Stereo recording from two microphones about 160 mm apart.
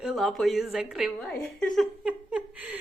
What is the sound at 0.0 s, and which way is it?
A woman's voice, centre (ahead or behind).